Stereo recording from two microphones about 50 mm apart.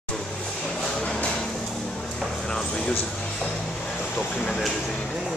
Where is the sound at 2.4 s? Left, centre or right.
Centre.